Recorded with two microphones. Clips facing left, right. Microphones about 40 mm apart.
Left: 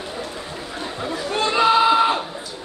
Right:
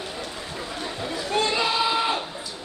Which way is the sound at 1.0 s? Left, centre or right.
Left.